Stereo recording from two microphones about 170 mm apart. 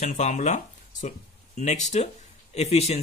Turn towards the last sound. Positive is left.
turn(degrees=40)  # may be behind; listen again after turning